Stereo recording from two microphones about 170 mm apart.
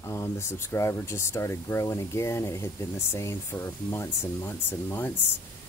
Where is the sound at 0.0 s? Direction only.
15° left (ahead or behind).